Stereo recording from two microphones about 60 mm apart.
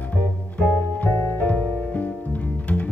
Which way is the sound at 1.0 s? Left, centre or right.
Left.